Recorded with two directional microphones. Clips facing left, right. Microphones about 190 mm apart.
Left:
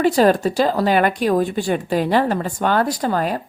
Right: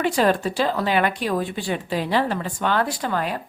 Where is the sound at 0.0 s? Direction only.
40° left (ahead or behind).